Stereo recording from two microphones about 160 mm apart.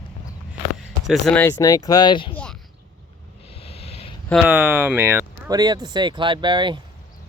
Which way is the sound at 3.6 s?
40° left (ahead or behind).